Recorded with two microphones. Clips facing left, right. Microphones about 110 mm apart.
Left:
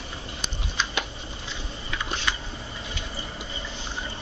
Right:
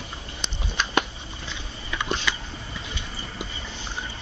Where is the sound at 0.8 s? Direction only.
55° right (ahead or behind).